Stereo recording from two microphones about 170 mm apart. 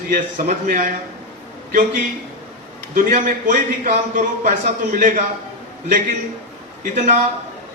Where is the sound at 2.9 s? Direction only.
50° right (ahead or behind).